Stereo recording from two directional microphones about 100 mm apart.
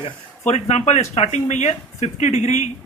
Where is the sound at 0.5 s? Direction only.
90° left.